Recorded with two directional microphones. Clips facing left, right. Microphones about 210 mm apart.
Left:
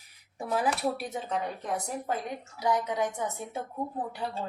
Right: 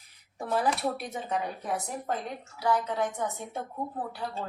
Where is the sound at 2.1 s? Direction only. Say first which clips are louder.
Right 1 dB; 5° left (ahead or behind).